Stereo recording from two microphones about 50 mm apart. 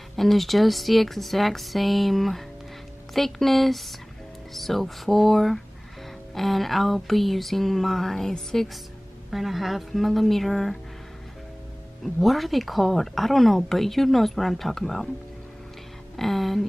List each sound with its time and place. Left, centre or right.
0.1 s speech: centre
9.3 s speech: centre
12.0 s speech: centre
16.2 s speech: centre